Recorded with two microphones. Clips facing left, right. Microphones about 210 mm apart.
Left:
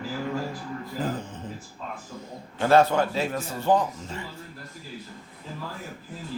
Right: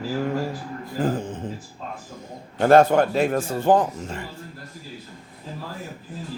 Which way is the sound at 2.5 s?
50° right (ahead or behind).